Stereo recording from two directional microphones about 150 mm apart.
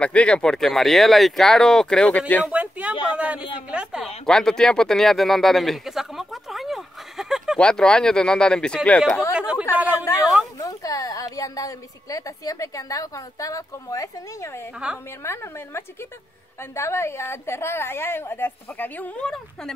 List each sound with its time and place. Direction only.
0.0 s speech: 10° left (ahead or behind)
2.4 s a sound: 10° right (ahead or behind)
3.2 s a man's voice: 10° right (ahead or behind); by 9.2 s 10° left (ahead or behind)
9.3 s chatter: 5° right (ahead or behind)
10.6 s a woman's voice: 25° left (ahead or behind); by 19.7 s 5° left (ahead or behind)